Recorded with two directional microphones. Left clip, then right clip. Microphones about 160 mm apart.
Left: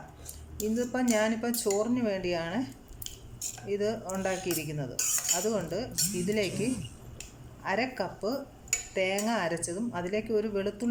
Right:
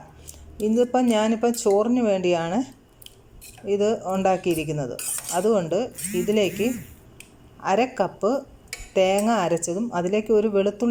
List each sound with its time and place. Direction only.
0.5 s speech: 15° right (ahead or behind)